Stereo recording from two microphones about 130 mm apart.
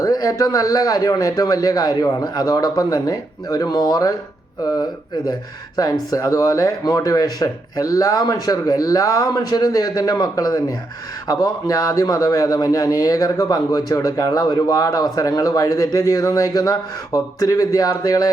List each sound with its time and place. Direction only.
0.0 s a man's voice: 25° left (ahead or behind)